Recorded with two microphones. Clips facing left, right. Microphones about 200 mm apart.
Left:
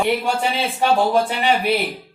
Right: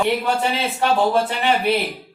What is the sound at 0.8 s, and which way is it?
Speech, 10° left (ahead or behind).